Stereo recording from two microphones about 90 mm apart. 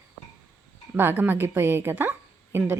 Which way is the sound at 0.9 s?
20° right (ahead or behind).